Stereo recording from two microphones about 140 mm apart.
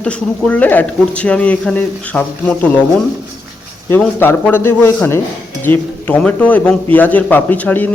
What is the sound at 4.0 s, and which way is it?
Speech, 15° left (ahead or behind).